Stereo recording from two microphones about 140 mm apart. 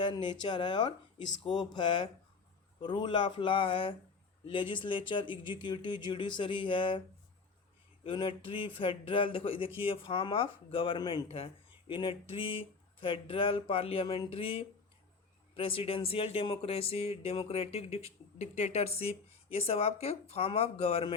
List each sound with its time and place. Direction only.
0.0 s speech: 35° left (ahead or behind)
8.0 s speech: 40° left (ahead or behind)